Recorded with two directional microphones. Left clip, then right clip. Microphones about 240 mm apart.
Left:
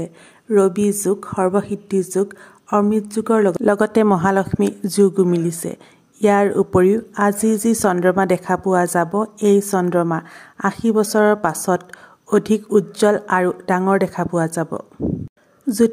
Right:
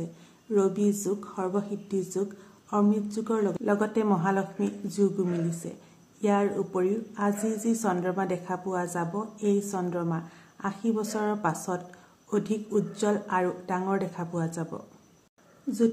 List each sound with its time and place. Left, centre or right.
0.0 s speech: left